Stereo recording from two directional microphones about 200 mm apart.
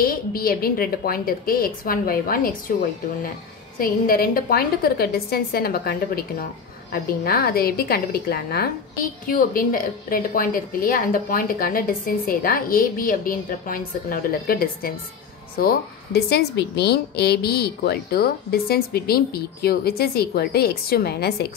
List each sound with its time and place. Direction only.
0.0 s a woman's voice: 45° left (ahead or behind)
3.7 s a woman's voice: 45° left (ahead or behind)